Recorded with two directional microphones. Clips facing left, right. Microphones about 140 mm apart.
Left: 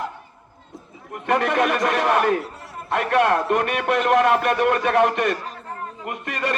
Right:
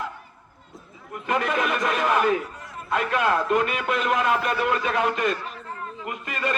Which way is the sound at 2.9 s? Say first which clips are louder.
Left 4 dB; 60° left (ahead or behind).